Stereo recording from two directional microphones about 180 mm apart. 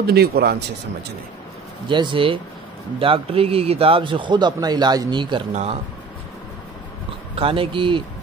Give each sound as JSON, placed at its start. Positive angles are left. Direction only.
{"t": 0.0, "sound": "speech", "side_deg": -65}
{"t": 1.9, "sound": "a man's voice", "side_deg": -25}
{"t": 5.5, "sound": "speech", "side_deg": -40}
{"t": 7.3, "sound": "a man's voice", "side_deg": -30}